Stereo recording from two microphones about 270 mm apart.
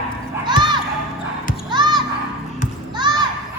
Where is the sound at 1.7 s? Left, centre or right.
Centre.